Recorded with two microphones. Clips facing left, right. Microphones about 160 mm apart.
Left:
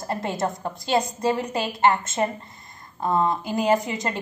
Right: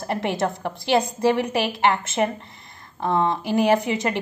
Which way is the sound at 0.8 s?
75° right (ahead or behind).